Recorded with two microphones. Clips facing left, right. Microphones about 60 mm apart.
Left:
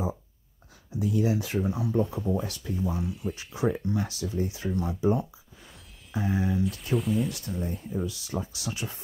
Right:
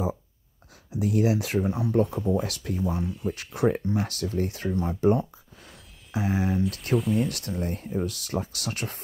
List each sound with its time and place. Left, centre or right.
0.9 s speech: right
1.6 s speech: right
1.9 s speech: right
3.0 s speech: centre
3.3 s speech: right
6.1 s speech: right
7.0 s speech: centre
7.2 s speech: right
7.6 s speech: right